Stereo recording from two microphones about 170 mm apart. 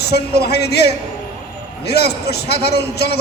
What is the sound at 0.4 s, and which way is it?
Speech, 75° left (ahead or behind).